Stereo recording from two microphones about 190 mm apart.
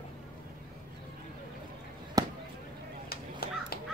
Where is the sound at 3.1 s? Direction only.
50° left (ahead or behind).